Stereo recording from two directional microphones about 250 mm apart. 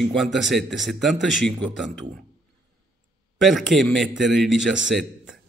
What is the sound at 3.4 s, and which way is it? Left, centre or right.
A man's voice, centre.